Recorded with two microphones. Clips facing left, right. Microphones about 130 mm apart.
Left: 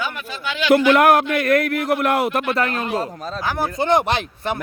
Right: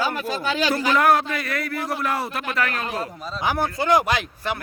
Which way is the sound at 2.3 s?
35° left (ahead or behind).